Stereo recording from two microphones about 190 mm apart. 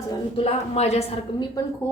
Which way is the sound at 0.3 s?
30° left (ahead or behind).